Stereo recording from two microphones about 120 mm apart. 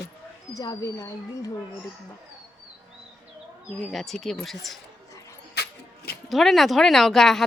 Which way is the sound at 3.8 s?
Centre (ahead or behind).